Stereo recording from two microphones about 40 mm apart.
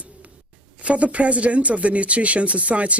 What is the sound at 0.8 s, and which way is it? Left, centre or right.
Speech, right.